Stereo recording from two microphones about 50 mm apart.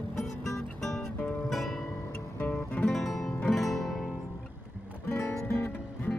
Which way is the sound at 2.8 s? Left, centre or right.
Centre.